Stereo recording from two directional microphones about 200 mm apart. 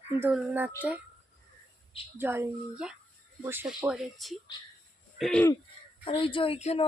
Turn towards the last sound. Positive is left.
turn(degrees=30)  # may be behind; listen again after turning